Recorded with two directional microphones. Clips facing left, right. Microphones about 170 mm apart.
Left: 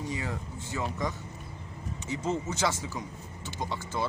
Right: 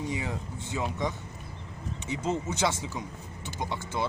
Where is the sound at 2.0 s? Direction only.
15° right (ahead or behind).